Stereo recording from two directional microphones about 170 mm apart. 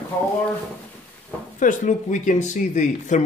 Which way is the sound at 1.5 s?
45° left (ahead or behind).